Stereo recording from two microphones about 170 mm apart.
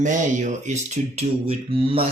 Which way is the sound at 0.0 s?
45° right (ahead or behind).